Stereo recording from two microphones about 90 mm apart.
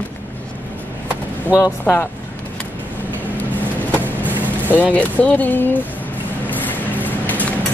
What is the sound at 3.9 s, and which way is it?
Vehicle, 20° left (ahead or behind).